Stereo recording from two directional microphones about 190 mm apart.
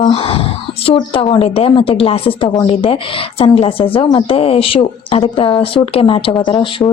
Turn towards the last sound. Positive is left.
turn(degrees=25)  # may be behind; listen again after turning